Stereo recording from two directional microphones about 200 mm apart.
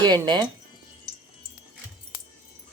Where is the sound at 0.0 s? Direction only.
20° right (ahead or behind).